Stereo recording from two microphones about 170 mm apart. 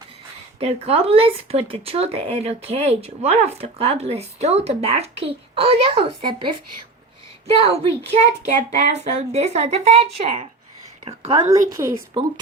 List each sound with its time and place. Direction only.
0.6 s a woman's voice: 35° right (ahead or behind)
11.7 s speech: 20° right (ahead or behind)